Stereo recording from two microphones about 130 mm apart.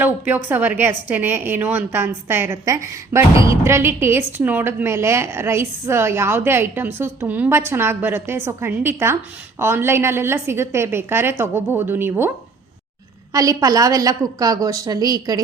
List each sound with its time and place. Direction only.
0.0 s a woman's voice: 15° right (ahead or behind)
13.3 s a woman's voice: 25° right (ahead or behind)